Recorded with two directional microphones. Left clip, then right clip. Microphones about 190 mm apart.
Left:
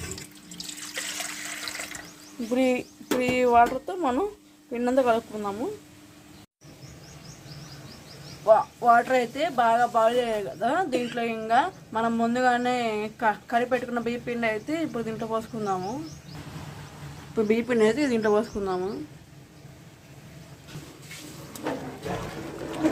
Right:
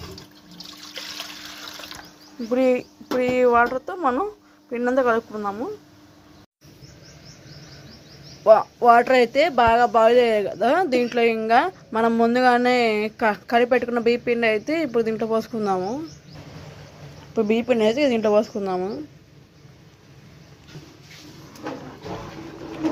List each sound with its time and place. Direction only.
2.5 s speech: 5° right (ahead or behind)
8.4 s speech: 40° right (ahead or behind)
17.3 s speech: 15° right (ahead or behind)